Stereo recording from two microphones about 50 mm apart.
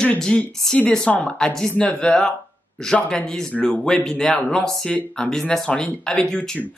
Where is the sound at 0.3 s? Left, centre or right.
Centre.